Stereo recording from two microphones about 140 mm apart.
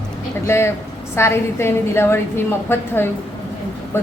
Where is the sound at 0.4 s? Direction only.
20° left (ahead or behind).